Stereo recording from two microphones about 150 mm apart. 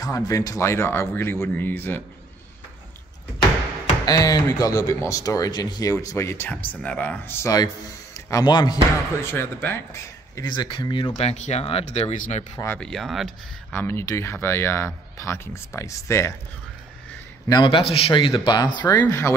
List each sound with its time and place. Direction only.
0.0 s speech: 25° left (ahead or behind)
4.0 s speech: 25° left (ahead or behind); by 7.3 s 10° left (ahead or behind)
7.4 s a man's voice: 25° left (ahead or behind)
9.2 s speech: 15° left (ahead or behind)
10.3 s speech: 30° left (ahead or behind); by 12.4 s 50° left (ahead or behind)
12.7 s speech: 5° left (ahead or behind)
13.7 s speech: 15° left (ahead or behind)
17.5 s speech: 30° left (ahead or behind)